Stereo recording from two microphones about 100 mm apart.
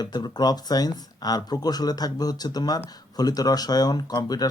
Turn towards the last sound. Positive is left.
turn(degrees=40)  # may be behind; listen again after turning